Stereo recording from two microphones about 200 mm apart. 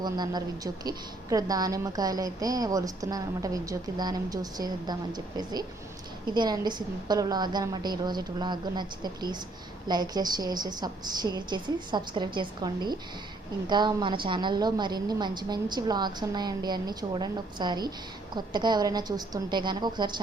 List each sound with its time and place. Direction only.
0.0 s a woman's voice: 20° right (ahead or behind)